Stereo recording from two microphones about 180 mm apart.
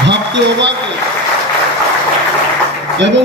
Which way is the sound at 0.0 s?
75° right (ahead or behind).